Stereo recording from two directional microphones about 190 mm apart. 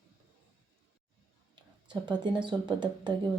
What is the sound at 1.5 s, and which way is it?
Speech, 25° right (ahead or behind).